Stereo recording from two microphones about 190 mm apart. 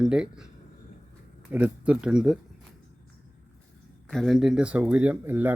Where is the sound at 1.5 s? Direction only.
5° right (ahead or behind).